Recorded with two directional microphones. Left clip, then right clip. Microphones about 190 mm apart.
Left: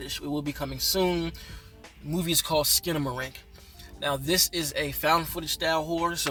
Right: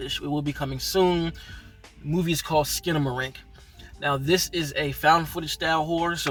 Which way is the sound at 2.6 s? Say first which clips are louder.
Right 2 dB; 15° left (ahead or behind).